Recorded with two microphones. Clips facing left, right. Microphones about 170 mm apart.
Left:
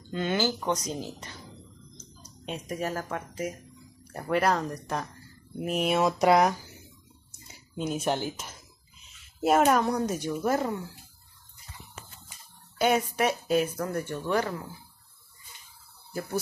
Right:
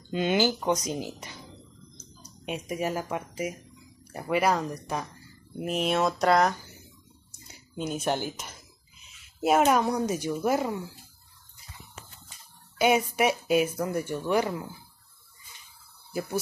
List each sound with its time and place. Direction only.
0.1 s speech: 20° right (ahead or behind)
2.4 s speech: 10° right (ahead or behind); by 6.5 s 10° left (ahead or behind)
7.4 s speech: centre (ahead or behind)
12.7 s speech: 10° right (ahead or behind)
16.1 s speech: 10° right (ahead or behind)